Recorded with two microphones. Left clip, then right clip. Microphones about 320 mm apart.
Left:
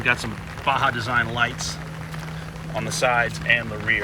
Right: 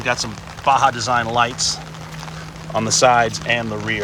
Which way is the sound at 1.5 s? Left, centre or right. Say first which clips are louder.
Right 9 dB; right.